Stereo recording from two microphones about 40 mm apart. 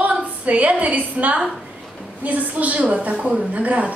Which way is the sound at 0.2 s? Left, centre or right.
Right.